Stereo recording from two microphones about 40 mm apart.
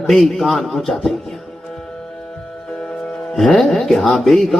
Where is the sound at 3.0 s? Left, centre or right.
Left.